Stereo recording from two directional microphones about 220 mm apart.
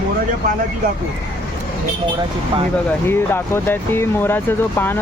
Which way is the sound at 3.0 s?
10° left (ahead or behind).